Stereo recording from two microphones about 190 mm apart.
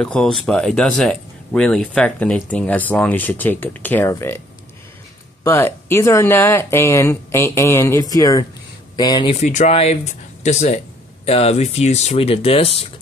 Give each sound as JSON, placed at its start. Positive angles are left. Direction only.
{"t": 0.0, "sound": "speech", "side_deg": 5}
{"t": 5.4, "sound": "speech", "side_deg": 10}